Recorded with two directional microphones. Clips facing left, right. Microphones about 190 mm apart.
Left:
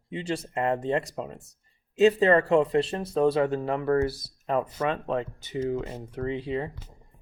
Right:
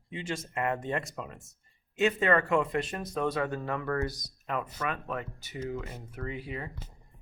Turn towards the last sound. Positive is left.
turn(degrees=30)  # may be behind; listen again after turning